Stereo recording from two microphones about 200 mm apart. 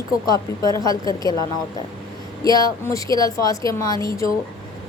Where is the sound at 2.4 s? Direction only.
20° left (ahead or behind).